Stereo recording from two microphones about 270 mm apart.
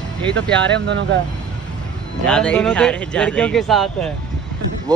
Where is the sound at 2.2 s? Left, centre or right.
Centre.